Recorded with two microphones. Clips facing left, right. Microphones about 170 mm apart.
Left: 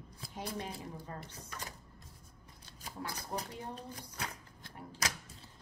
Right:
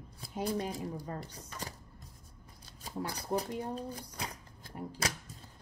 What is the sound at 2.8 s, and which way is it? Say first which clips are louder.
Speech: right 4 dB; 30° right (ahead or behind).